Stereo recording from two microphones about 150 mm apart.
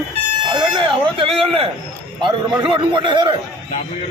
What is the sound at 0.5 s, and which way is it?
Speech, 35° right (ahead or behind).